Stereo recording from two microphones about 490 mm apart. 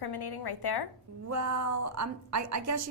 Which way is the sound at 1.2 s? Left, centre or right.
Right.